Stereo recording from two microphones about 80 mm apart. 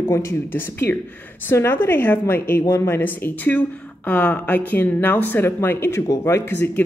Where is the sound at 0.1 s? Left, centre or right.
Left.